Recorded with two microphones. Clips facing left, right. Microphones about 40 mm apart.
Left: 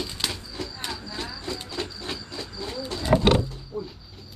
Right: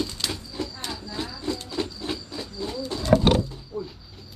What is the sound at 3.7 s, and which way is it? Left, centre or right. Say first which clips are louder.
Bird: even; centre.